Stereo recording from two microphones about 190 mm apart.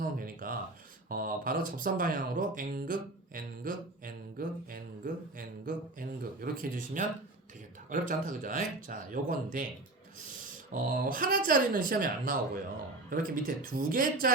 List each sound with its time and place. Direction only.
0.0 s a sound: 45° right (ahead or behind)
1.0 s speech: 50° right (ahead or behind)
10.7 s speech: 45° right (ahead or behind)